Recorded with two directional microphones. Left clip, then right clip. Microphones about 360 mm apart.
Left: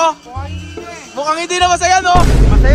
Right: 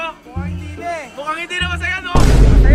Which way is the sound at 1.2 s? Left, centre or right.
Centre.